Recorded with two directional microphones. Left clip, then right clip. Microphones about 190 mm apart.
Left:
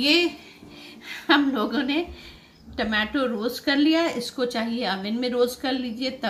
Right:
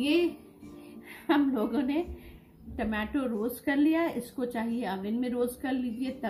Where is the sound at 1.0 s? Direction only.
5° left (ahead or behind).